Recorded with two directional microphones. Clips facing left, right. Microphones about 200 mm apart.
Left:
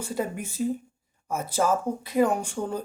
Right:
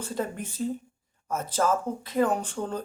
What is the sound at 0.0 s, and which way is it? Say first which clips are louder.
Speech: left 2 dB; 10° left (ahead or behind).